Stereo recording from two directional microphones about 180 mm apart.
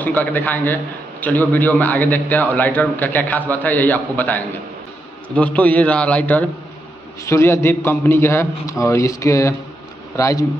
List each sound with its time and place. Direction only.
0.0 s a man's voice: 10° left (ahead or behind)